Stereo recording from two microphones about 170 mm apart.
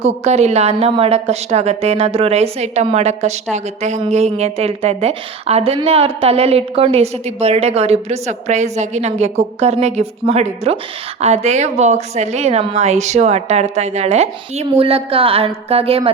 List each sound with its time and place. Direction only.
0.0 s a woman's voice: 40° right (ahead or behind)